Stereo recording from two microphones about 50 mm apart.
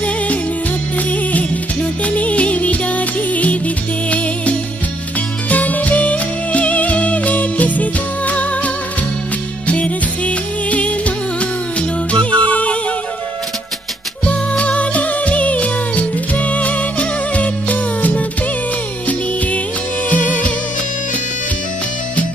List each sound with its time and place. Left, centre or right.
0.9 s music: left
14.6 s music: left
20.1 s music: left